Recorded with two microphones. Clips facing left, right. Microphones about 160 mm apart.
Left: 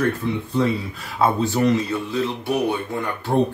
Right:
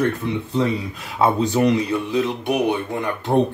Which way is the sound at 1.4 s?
15° right (ahead or behind).